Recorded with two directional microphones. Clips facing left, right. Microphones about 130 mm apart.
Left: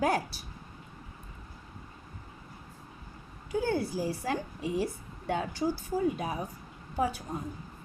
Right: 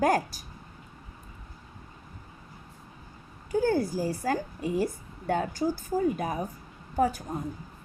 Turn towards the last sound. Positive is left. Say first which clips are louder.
# right 4 dB
turn(degrees=-45)  # may be behind; listen again after turning